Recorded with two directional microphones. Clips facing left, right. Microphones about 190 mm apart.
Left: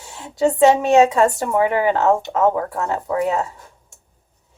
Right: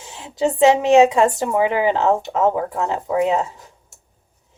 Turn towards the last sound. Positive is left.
turn(degrees=-20)  # may be behind; listen again after turning